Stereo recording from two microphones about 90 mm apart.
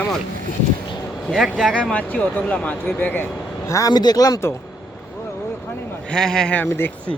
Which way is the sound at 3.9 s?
50° left (ahead or behind).